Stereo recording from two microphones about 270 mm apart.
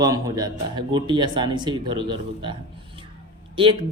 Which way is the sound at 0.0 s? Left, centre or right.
Centre.